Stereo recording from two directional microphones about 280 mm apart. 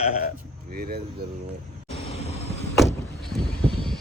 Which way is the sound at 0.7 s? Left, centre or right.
Right.